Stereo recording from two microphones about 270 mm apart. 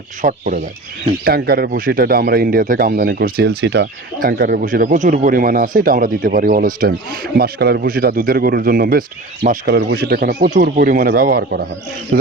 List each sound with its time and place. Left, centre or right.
0.2 s speech: right